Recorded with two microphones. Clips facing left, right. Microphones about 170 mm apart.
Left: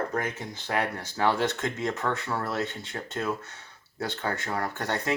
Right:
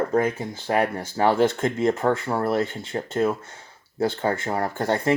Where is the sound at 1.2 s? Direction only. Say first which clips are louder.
Right 6 dB; 50° right (ahead or behind).